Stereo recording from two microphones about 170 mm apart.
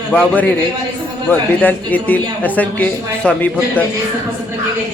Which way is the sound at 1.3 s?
10° left (ahead or behind).